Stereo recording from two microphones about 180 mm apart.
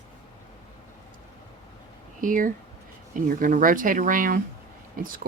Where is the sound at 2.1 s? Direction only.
50° right (ahead or behind).